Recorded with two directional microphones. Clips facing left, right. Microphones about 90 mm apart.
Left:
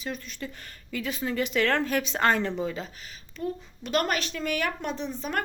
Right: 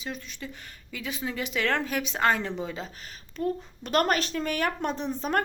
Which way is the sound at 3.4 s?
40° right (ahead or behind).